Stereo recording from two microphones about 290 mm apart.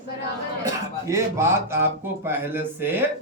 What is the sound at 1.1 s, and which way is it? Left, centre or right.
Speech, centre.